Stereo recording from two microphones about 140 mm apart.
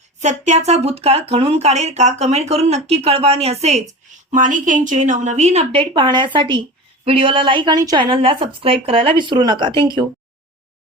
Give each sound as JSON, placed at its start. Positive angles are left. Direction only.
{"t": 0.2, "sound": "speech", "side_deg": -55}
{"t": 4.3, "sound": "speech", "side_deg": -70}
{"t": 5.8, "sound": "a woman's voice", "side_deg": -35}